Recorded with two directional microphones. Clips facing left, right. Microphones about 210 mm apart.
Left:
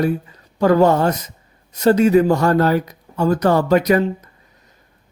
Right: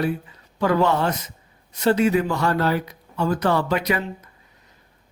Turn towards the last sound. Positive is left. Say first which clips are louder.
# left 8 dB
turn(degrees=40)  # may be behind; listen again after turning